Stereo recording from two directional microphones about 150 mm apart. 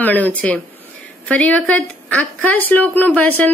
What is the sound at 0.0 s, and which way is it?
Speech, 10° left (ahead or behind).